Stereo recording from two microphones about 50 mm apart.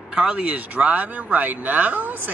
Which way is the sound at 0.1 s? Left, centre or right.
Right.